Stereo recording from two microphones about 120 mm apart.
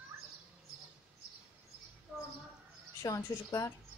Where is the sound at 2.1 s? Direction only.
10° right (ahead or behind).